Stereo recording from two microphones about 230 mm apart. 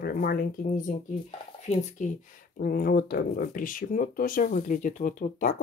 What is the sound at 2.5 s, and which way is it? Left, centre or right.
Speech, left.